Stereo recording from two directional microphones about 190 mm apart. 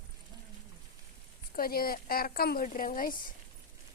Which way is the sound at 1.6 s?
50° left (ahead or behind).